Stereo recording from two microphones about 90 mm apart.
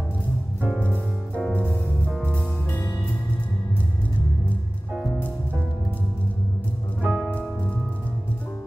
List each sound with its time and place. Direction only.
0.7 s music: 15° left (ahead or behind)
7.0 s music: 10° right (ahead or behind)